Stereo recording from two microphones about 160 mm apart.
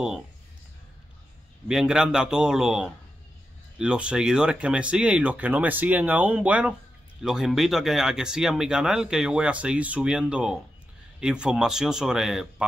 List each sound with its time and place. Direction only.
1.7 s speech: 5° right (ahead or behind)